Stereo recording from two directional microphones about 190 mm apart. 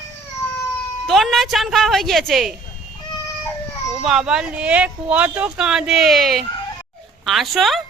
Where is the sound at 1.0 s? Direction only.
Centre (ahead or behind).